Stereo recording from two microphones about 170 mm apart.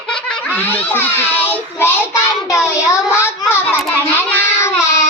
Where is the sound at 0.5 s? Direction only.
10° left (ahead or behind).